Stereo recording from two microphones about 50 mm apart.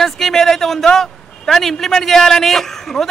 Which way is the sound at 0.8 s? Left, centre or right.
Centre.